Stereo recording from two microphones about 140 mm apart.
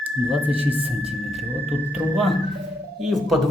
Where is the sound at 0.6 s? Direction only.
45° right (ahead or behind).